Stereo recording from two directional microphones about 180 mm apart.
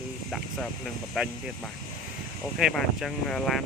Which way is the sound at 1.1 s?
Centre (ahead or behind).